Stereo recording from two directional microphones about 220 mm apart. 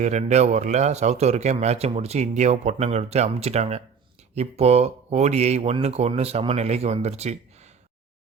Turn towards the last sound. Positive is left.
turn(degrees=-30)  # may be behind; listen again after turning